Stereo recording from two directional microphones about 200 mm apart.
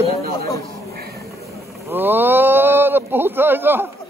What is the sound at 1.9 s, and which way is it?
Speech, 10° right (ahead or behind).